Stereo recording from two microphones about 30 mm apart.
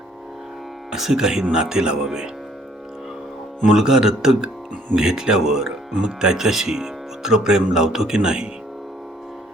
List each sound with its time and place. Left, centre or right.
1.1 s speech: right
3.7 s speech: centre
8.1 s speech: right